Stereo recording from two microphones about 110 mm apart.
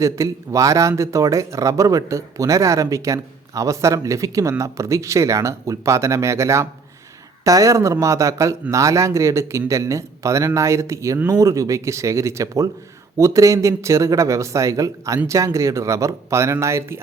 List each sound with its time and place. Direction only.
0.0 s speech: 30° right (ahead or behind)